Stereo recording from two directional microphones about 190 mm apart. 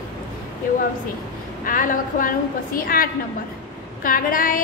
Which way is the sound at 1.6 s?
45° left (ahead or behind).